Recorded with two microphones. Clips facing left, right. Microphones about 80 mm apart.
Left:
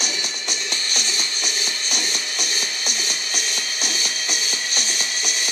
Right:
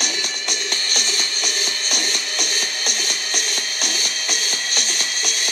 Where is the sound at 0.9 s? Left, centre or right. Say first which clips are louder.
Right 2 dB; right.